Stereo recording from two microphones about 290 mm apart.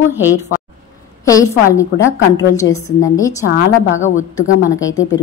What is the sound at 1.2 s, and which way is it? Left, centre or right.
A woman's voice, centre.